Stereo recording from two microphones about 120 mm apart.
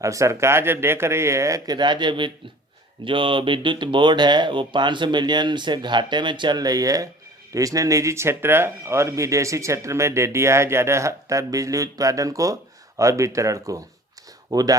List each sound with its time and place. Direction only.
0.0 s speech: 25° right (ahead or behind)